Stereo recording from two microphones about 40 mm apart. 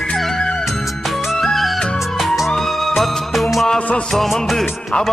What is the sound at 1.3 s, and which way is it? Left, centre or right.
Music, centre.